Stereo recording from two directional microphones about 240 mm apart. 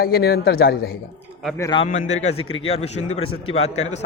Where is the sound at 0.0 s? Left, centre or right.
Left.